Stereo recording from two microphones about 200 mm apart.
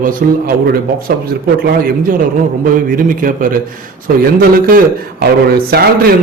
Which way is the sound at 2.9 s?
45° right (ahead or behind).